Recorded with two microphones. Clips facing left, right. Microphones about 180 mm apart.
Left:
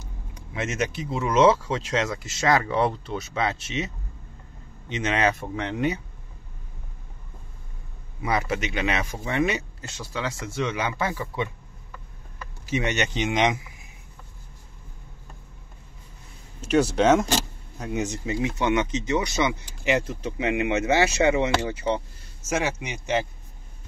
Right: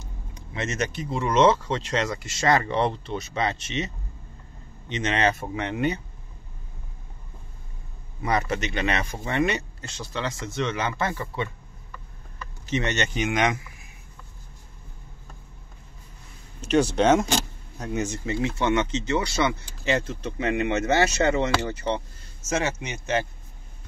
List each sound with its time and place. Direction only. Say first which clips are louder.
0.0 s speech: even; 10° left (ahead or behind)
5.4 s speech: even; 5° right (ahead or behind)
8.2 s speech: even; 5° left (ahead or behind)
12.6 s speech: left 1 dB; 10° left (ahead or behind)
16.6 s speech: even; 5° left (ahead or behind)